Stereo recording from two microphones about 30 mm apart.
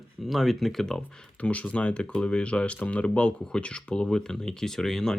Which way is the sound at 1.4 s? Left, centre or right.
Left.